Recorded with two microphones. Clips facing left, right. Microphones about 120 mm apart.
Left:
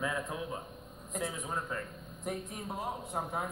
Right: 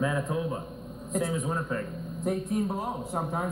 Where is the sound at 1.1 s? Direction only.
30° right (ahead or behind).